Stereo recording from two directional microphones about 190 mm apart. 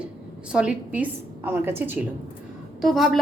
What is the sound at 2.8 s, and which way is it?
Speech, centre (ahead or behind).